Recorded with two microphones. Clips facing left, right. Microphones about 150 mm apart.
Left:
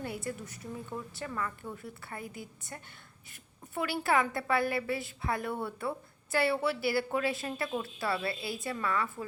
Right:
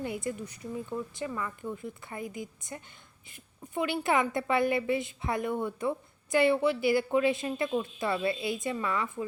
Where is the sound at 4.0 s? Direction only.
20° right (ahead or behind).